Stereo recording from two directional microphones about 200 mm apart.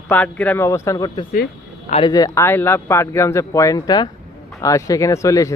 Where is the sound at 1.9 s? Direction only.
20° left (ahead or behind).